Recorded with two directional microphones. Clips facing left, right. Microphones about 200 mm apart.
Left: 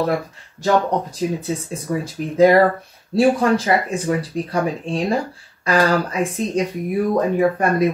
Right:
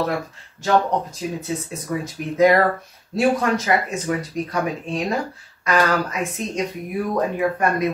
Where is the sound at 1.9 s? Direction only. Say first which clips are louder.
Left 3 dB; 30° left (ahead or behind).